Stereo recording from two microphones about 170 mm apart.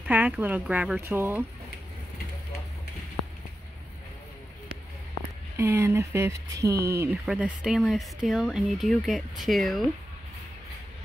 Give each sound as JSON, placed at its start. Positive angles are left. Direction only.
{"t": 0.1, "sound": "speech", "side_deg": -10}
{"t": 5.6, "sound": "speech", "side_deg": -15}
{"t": 7.2, "sound": "speech", "side_deg": -5}